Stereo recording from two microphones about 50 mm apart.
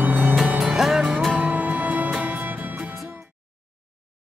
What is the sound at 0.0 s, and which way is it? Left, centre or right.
Music, right.